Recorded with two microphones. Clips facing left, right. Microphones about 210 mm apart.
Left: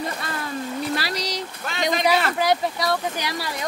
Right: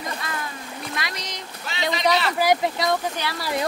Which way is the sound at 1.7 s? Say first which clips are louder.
Left 2 dB; 50° left (ahead or behind).